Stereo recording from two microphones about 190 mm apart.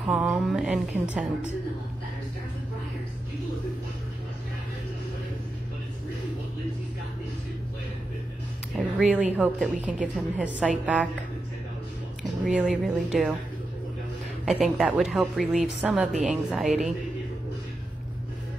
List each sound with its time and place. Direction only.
0.0 s a woman's voice: 5° right (ahead or behind)
9.0 s a woman's voice: 5° right (ahead or behind)
12.4 s a woman's voice: 5° right (ahead or behind)
14.4 s a woman's voice: centre (ahead or behind)